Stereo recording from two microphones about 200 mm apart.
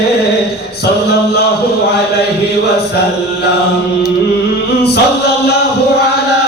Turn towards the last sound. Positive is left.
turn(degrees=55)  # may be behind; listen again after turning